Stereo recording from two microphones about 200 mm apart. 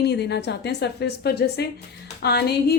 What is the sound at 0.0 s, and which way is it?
A woman's voice, 55° left (ahead or behind).